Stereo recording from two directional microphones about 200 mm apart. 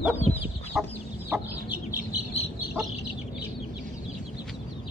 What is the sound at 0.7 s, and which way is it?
Chicken, centre (ahead or behind).